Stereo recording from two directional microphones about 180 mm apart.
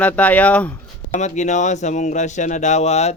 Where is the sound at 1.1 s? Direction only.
40° left (ahead or behind).